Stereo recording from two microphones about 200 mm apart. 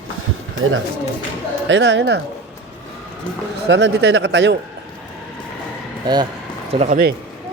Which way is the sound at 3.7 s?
60° right (ahead or behind).